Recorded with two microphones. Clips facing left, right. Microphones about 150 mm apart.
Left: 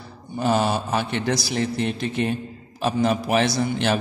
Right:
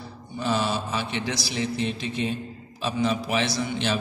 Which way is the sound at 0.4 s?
50° left (ahead or behind).